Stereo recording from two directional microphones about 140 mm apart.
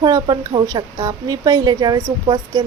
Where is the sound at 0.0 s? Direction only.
30° right (ahead or behind).